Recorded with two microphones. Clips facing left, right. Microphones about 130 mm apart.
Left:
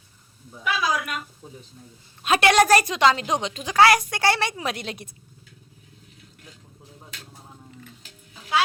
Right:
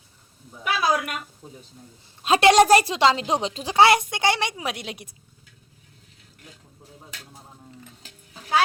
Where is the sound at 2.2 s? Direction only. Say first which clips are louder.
Right 3 dB; 25° right (ahead or behind).